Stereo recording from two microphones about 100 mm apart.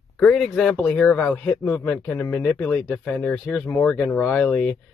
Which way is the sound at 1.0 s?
15° left (ahead or behind).